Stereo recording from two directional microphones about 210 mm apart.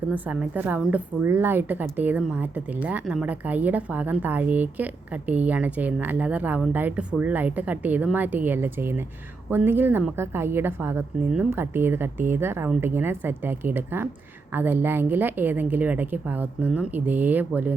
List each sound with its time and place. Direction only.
0.1 s a woman's voice: 10° right (ahead or behind)